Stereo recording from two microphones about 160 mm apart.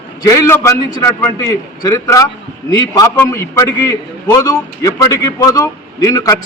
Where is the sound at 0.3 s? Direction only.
20° left (ahead or behind).